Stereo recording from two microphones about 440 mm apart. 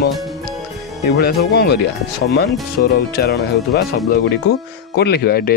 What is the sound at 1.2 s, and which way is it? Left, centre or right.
Speech, left.